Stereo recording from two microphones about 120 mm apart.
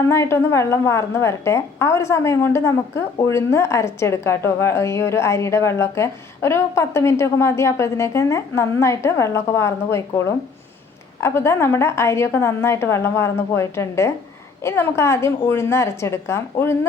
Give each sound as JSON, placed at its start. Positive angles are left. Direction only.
{"t": 0.1, "sound": "a woman's voice", "side_deg": 20}